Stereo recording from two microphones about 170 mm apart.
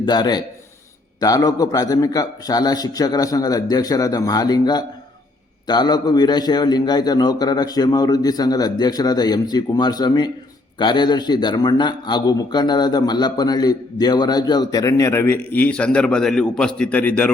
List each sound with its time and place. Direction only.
0.0 s a man's voice: 25° left (ahead or behind); by 17.3 s 10° left (ahead or behind)